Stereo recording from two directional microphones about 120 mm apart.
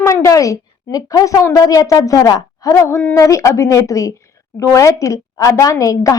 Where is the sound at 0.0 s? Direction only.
25° left (ahead or behind).